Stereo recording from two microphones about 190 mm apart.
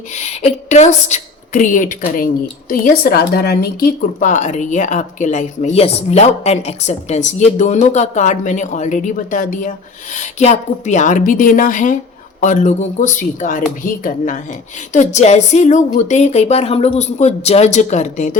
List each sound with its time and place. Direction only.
0.1 s a woman's voice: 35° left (ahead or behind)